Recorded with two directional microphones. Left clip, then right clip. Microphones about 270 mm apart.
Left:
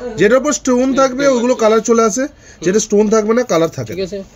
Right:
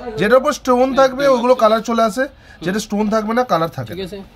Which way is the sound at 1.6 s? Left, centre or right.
Right.